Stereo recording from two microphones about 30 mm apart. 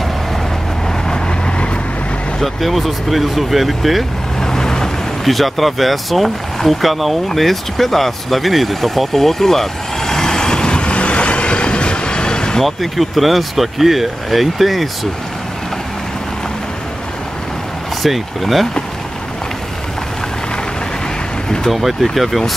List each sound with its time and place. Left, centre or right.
2.4 s speech: centre
4.4 s vehicle: centre
5.2 s speech: centre; by 12.6 s left
12.6 s speech: centre
18.0 s speech: centre
22.0 s speech: centre